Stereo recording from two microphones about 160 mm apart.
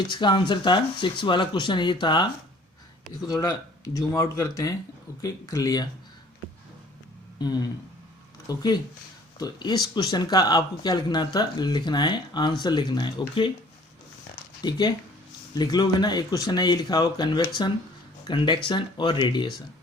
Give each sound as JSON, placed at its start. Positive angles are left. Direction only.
{"t": 0.1, "sound": "speech", "side_deg": 30}
{"t": 7.3, "sound": "speech", "side_deg": 25}
{"t": 14.6, "sound": "speech", "side_deg": 25}